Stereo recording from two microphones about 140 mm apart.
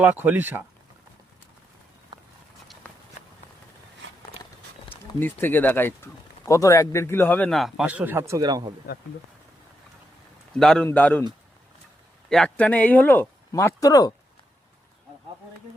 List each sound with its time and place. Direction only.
0.0 s speech: 15° right (ahead or behind)
2.8 s walk: 10° left (ahead or behind)
4.9 s speech: 15° left (ahead or behind)
7.9 s speech: 10° right (ahead or behind); by 8.7 s 30° right (ahead or behind)
10.6 s a man's voice: 5° left (ahead or behind)
12.3 s speech: 5° left (ahead or behind); by 14.1 s 25° left (ahead or behind)